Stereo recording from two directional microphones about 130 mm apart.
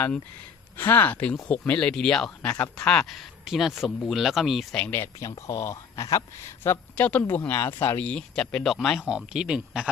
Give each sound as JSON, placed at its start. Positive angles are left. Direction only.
{"t": 0.8, "sound": "a woman's voice", "side_deg": 15}
{"t": 4.8, "sound": "a woman's voice", "side_deg": 15}